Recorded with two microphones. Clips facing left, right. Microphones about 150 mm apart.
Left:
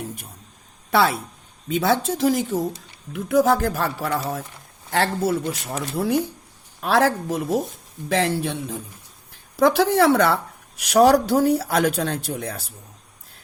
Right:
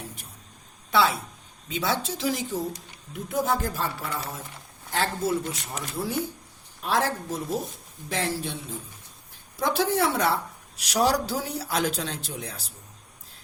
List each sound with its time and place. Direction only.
1.7 s speech: 50° left (ahead or behind)
3.1 s speech: 90° left
4.9 s speech: 65° left (ahead or behind)
6.8 s a woman's voice: 85° left
9.6 s speech: 80° left
10.8 s speech: 55° left (ahead or behind)